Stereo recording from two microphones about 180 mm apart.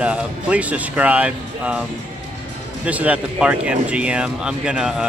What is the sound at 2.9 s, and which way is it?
Speech, 10° right (ahead or behind).